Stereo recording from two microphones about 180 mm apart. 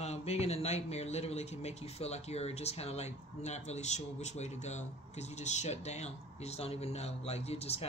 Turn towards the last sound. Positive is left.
turn(degrees=35)  # may be behind; listen again after turning